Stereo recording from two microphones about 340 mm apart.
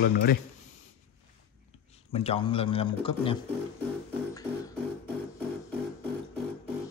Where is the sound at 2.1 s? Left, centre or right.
Centre.